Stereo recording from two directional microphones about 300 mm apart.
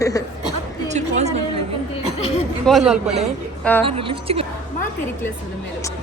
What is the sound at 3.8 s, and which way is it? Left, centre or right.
Speech, centre.